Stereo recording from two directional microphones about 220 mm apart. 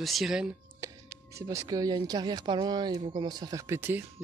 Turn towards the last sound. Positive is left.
turn(degrees=-10)  # may be behind; listen again after turning